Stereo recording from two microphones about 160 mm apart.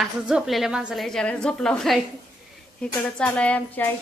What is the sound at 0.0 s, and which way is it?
A woman's voice, centre (ahead or behind).